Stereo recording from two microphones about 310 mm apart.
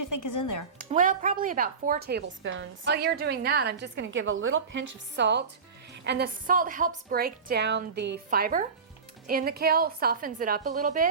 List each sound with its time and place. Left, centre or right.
0.1 s speech: left
0.8 s a woman's voice: right